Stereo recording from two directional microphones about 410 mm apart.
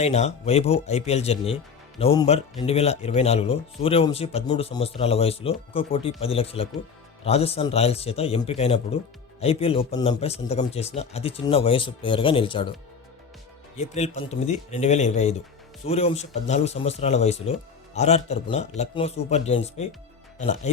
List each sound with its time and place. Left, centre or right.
0.0 s speech: centre
13.7 s speech: centre